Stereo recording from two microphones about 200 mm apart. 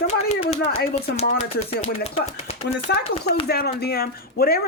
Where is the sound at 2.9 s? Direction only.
55° left (ahead or behind).